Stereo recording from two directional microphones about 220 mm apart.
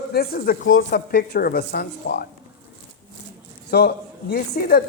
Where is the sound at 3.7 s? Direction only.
45° left (ahead or behind).